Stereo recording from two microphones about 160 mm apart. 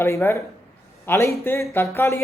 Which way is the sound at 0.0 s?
15° left (ahead or behind).